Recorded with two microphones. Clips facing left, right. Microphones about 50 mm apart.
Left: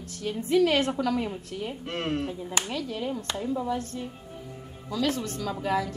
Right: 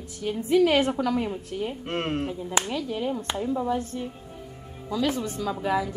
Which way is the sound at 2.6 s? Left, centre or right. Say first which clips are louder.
Right 3 dB; centre.